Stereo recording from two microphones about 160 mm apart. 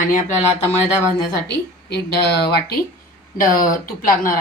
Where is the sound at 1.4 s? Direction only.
90° left.